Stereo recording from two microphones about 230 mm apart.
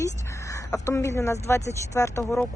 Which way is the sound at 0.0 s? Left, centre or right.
Centre.